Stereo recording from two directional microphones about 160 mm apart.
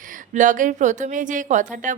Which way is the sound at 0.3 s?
55° right (ahead or behind).